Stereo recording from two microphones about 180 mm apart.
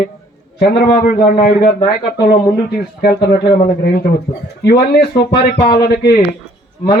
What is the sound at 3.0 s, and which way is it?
Speech, 60° left (ahead or behind).